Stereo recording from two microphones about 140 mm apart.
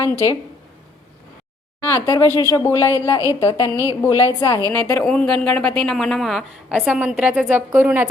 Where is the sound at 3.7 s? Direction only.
20° right (ahead or behind).